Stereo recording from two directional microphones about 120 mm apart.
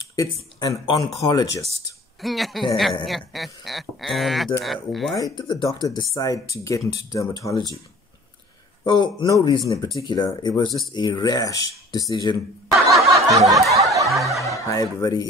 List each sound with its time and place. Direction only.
0.1 s speech: 30° left (ahead or behind)
2.2 s speech: centre (ahead or behind)
5.1 s speech: 35° left (ahead or behind)
8.8 s speech: 40° left (ahead or behind)
12.6 s snicker: centre (ahead or behind)
13.3 s snicker: 30° right (ahead or behind)
14.1 s speech: centre (ahead or behind)
14.7 s speech: 30° left (ahead or behind)